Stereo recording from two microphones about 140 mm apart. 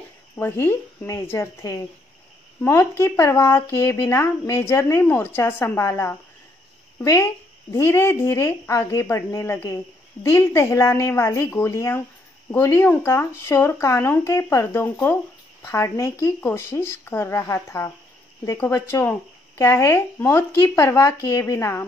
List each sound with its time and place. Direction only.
0.4 s speech: 15° left (ahead or behind)